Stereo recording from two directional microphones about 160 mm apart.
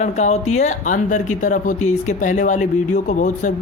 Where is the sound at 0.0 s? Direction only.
45° left (ahead or behind).